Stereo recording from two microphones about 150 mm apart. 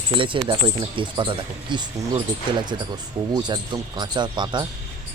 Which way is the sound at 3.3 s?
30° right (ahead or behind).